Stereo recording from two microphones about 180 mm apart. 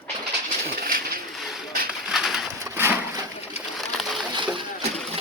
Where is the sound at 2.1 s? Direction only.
Centre (ahead or behind).